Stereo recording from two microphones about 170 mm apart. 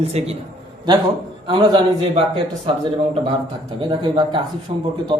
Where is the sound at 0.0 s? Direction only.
40° right (ahead or behind).